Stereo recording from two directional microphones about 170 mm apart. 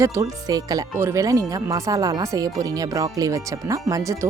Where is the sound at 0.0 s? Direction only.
15° right (ahead or behind).